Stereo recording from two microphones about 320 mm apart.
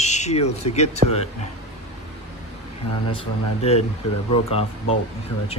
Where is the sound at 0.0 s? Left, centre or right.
Left.